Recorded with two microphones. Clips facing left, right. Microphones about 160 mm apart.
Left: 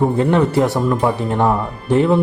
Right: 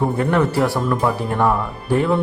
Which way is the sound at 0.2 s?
20° left (ahead or behind).